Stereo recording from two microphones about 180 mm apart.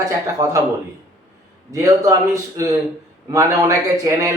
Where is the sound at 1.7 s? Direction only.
15° right (ahead or behind).